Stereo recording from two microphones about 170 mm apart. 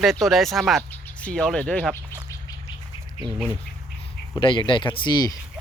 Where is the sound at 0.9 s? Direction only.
10° left (ahead or behind).